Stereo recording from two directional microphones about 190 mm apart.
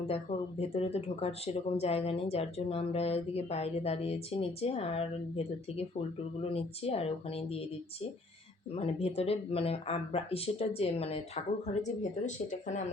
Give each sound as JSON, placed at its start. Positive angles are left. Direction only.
{"t": 0.1, "sound": "speech", "side_deg": 30}
{"t": 8.7, "sound": "speech", "side_deg": 30}